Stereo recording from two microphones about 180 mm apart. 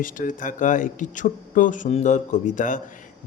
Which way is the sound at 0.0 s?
50° left (ahead or behind).